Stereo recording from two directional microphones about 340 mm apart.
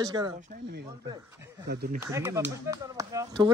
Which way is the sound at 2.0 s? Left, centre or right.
Centre.